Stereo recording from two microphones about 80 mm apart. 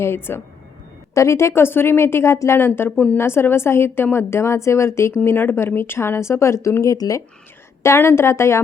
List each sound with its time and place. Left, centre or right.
0.0 s a woman's voice: left
6.9 s speech: left
7.8 s a woman's voice: left